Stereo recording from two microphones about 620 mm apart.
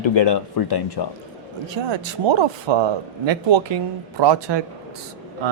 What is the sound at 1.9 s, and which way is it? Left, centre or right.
Speech, right.